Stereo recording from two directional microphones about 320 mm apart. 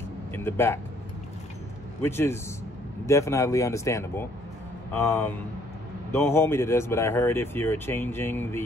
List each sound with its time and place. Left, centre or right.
0.3 s speech: centre
2.0 s speech: centre